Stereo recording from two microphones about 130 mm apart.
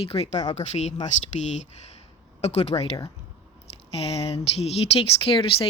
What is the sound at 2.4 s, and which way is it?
Speech, 55° left (ahead or behind).